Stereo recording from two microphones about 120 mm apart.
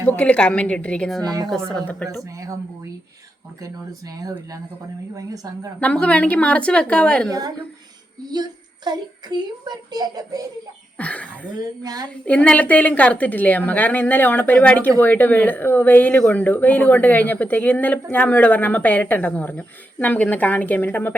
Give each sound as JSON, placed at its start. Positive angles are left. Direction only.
{"t": 0.1, "sound": "a woman's voice", "side_deg": 10}
{"t": 2.2, "sound": "speech", "side_deg": -25}
{"t": 3.6, "sound": "a woman's voice", "side_deg": -30}
{"t": 5.8, "sound": "a woman's voice", "side_deg": 10}
{"t": 7.3, "sound": "a woman's voice", "side_deg": -30}
{"t": 10.9, "sound": "a woman's voice", "side_deg": 10}
{"t": 11.8, "sound": "a woman's voice", "side_deg": -30}
{"t": 12.2, "sound": "a woman's voice", "side_deg": 10}